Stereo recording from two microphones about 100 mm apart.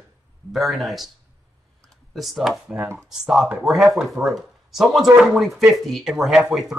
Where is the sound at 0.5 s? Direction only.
Centre (ahead or behind).